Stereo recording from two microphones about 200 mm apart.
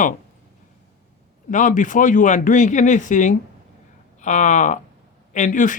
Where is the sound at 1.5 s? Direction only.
40° left (ahead or behind).